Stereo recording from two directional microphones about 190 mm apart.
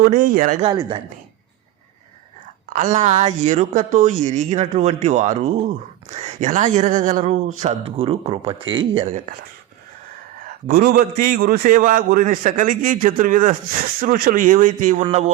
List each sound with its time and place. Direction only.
0.0 s a man's voice: 45° right (ahead or behind)
0.7 s speech: 20° right (ahead or behind)
2.6 s a woman's voice: 40° right (ahead or behind)
10.7 s a man's voice: 50° right (ahead or behind)